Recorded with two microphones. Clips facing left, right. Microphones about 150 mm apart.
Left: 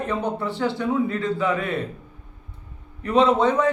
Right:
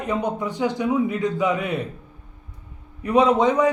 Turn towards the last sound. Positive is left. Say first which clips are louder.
# right 1 dB
turn(degrees=-15)  # may be behind; listen again after turning